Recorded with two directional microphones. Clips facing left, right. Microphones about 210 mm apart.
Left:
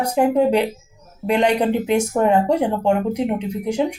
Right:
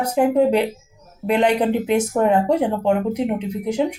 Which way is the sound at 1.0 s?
5° right (ahead or behind).